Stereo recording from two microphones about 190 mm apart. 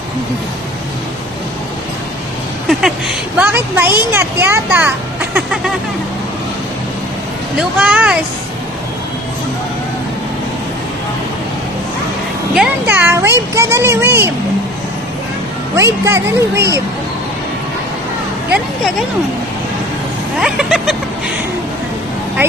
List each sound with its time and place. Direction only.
2.6 s speech: centre (ahead or behind)
3.4 s speech: 10° right (ahead or behind)
7.8 s speech: 5° right (ahead or behind)
12.5 s speech: 5° right (ahead or behind)
15.7 s speech: 15° right (ahead or behind)
20.3 s speech: 5° right (ahead or behind)